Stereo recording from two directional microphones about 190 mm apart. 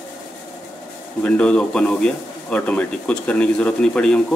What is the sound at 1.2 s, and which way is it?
Speech, 5° left (ahead or behind).